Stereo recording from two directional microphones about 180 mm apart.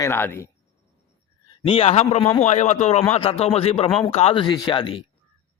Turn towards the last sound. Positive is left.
turn(degrees=25)  # may be behind; listen again after turning